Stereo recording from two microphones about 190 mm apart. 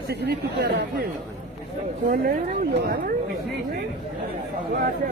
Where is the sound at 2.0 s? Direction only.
50° right (ahead or behind).